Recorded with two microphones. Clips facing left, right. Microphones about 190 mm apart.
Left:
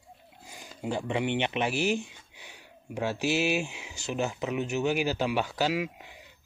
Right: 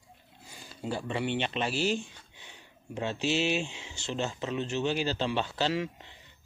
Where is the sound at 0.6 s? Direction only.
15° left (ahead or behind).